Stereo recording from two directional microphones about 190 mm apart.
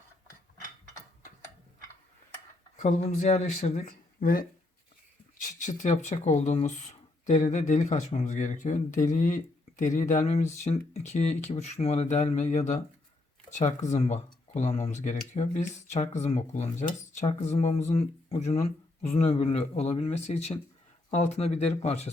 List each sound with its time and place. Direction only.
2.8 s speech: 40° left (ahead or behind)